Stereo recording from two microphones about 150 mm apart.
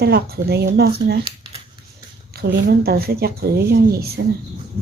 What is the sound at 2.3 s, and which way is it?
Speech, 90° right.